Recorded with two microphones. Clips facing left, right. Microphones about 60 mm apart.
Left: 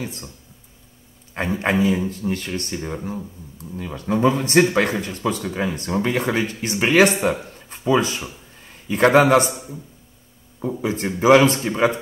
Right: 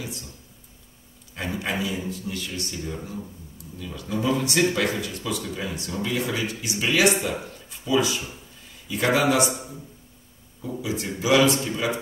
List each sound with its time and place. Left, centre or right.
0.0 s speech: left
1.3 s a man's voice: left
10.8 s speech: left